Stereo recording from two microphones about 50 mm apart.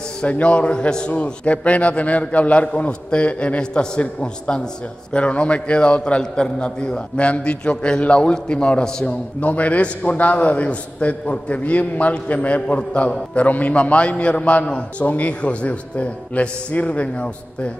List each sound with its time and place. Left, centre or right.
0.2 s a man's voice: left